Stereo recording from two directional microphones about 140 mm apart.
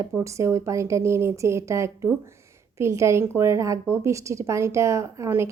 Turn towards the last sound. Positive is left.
turn(degrees=-20)  # may be behind; listen again after turning